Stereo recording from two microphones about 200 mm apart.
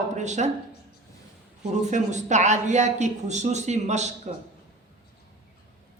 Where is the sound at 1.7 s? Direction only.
35° right (ahead or behind).